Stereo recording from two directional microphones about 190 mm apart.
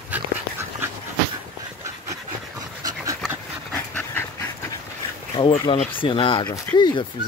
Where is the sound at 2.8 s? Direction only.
20° right (ahead or behind).